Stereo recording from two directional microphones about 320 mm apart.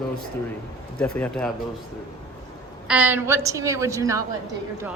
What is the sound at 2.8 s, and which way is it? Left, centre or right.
A woman's voice, centre.